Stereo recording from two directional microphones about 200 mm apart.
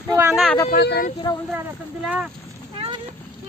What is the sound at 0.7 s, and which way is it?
Speech, 50° left (ahead or behind).